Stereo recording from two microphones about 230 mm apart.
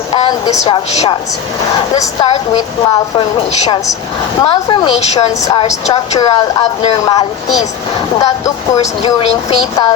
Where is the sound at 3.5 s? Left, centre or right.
Left.